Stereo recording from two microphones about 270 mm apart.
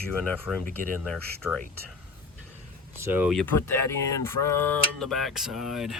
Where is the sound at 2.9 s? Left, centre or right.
Centre.